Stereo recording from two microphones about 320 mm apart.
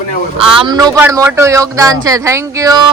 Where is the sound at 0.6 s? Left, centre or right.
Centre.